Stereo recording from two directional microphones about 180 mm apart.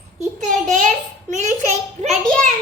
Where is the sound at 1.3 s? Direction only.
40° right (ahead or behind).